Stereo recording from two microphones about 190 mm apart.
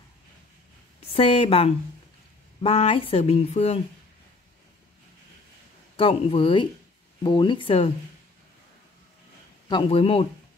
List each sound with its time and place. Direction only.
1.1 s speech: 30° left (ahead or behind)
5.9 s speech: 30° left (ahead or behind)
9.7 s speech: 30° left (ahead or behind)